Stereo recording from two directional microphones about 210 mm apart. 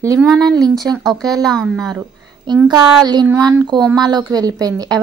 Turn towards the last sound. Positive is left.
turn(degrees=-20)  # may be behind; listen again after turning